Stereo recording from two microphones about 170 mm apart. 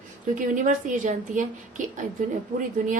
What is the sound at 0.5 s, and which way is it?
A woman's voice, 50° right (ahead or behind).